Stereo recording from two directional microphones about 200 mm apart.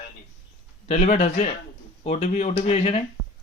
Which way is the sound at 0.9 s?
35° left (ahead or behind).